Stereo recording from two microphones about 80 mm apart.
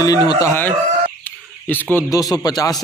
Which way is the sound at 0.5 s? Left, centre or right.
Left.